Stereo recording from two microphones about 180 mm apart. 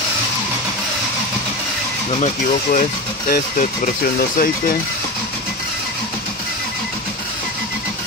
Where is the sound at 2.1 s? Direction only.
40° left (ahead or behind).